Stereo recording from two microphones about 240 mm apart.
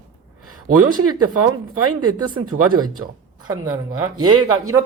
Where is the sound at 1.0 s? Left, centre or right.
Right.